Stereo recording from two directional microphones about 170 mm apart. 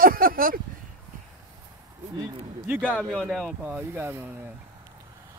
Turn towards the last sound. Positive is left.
turn(degrees=-15)  # may be behind; listen again after turning